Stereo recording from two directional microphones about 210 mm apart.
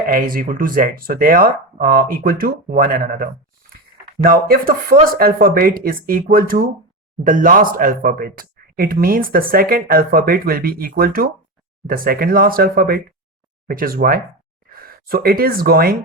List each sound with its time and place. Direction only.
0.0 s speech: 45° right (ahead or behind)